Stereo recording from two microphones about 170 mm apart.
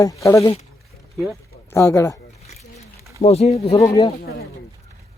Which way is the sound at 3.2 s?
40° left (ahead or behind).